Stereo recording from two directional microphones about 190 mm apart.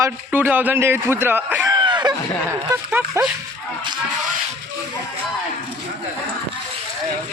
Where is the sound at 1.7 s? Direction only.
20° right (ahead or behind).